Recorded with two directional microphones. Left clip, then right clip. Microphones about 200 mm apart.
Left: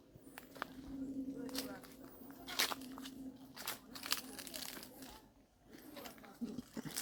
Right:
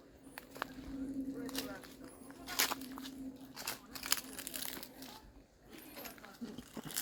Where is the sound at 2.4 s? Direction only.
55° right (ahead or behind).